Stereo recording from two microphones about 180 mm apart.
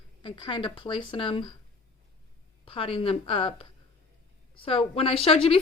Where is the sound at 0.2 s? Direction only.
25° left (ahead or behind).